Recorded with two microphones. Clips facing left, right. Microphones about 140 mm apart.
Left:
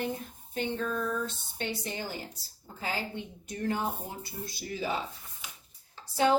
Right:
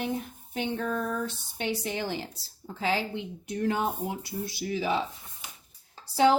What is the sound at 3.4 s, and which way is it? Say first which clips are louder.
Speech: right 4 dB; 65° right (ahead or behind).